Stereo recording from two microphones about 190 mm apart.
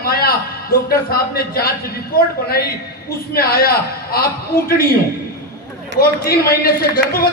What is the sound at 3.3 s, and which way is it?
A man's voice, 50° left (ahead or behind).